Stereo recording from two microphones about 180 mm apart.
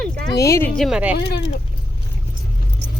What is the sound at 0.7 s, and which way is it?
Speech, centre (ahead or behind).